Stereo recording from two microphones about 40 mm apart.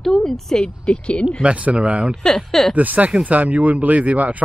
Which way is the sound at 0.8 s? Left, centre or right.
Left.